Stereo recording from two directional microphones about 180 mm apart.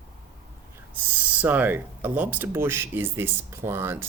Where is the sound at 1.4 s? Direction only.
10° right (ahead or behind).